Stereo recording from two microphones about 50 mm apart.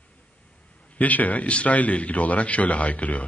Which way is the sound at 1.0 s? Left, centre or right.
Left.